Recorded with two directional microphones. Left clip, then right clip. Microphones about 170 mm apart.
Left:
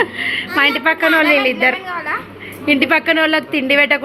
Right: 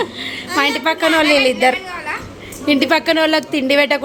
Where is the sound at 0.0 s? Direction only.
15° right (ahead or behind).